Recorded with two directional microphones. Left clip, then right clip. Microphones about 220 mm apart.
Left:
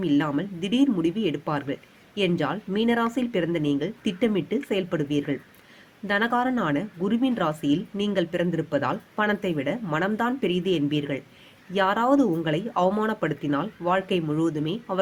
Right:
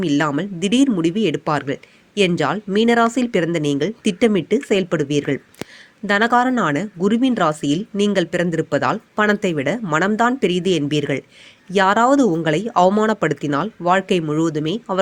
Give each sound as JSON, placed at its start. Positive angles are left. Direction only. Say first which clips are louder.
{"t": 0.0, "sound": "speech", "louder": "right 5 dB", "side_deg": -35}